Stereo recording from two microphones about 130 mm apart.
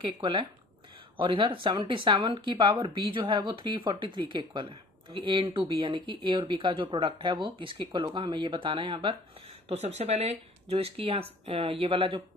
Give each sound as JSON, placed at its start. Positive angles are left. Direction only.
{"t": 0.0, "sound": "speech", "side_deg": -40}
{"t": 9.7, "sound": "speech", "side_deg": -55}